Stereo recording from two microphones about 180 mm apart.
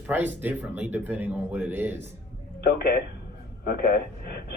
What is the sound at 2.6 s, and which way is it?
A man's voice, 60° left (ahead or behind).